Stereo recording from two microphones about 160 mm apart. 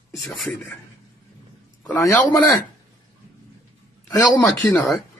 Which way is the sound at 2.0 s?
15° left (ahead or behind).